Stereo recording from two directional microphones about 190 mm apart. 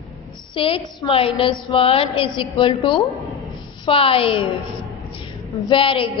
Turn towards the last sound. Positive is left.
turn(degrees=25)  # may be behind; listen again after turning